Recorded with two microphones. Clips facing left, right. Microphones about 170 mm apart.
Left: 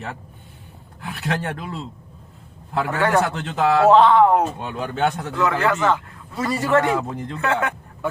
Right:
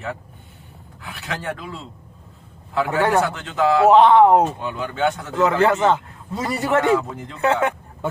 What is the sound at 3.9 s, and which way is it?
Speech, 20° right (ahead or behind).